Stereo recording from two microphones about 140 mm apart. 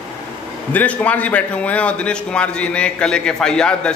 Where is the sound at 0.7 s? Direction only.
10° left (ahead or behind).